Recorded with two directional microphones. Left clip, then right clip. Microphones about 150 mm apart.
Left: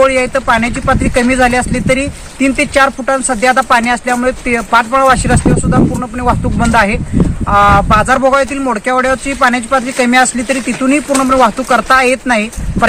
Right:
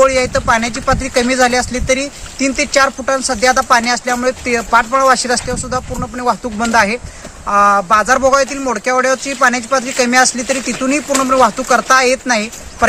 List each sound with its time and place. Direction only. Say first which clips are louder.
0.0 s speech: left 2 dB; 10° right (ahead or behind)